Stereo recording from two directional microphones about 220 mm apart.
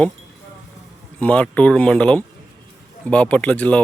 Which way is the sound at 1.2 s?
5° left (ahead or behind).